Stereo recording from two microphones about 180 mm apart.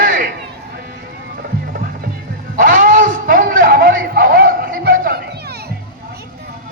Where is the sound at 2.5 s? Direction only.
45° right (ahead or behind); by 5.7 s 60° right (ahead or behind).